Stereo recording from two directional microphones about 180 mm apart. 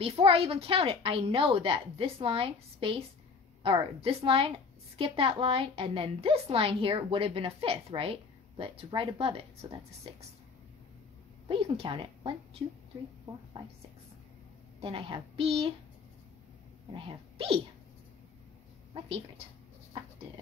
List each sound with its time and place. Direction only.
0.0 s a woman's voice: 30° right (ahead or behind)
11.4 s a woman's voice: 30° right (ahead or behind)
14.8 s a woman's voice: 30° right (ahead or behind)
16.9 s a woman's voice: 30° right (ahead or behind)
19.0 s a woman's voice: 30° right (ahead or behind)